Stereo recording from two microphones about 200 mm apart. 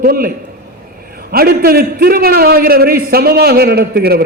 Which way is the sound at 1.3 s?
50° right (ahead or behind).